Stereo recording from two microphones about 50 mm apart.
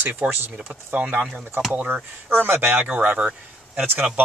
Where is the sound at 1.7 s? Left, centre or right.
Right.